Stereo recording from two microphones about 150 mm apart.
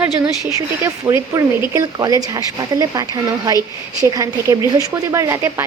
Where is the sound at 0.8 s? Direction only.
20° right (ahead or behind).